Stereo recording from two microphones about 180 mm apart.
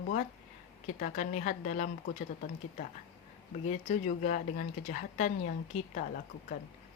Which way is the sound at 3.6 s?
45° left (ahead or behind).